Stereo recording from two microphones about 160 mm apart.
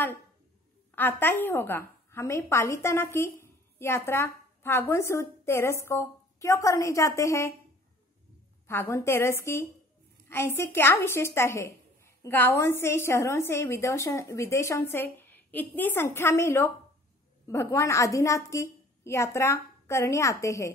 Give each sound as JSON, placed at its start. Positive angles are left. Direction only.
{"t": 0.9, "sound": "a woman's voice", "side_deg": 10}
{"t": 8.6, "sound": "a woman's voice", "side_deg": 15}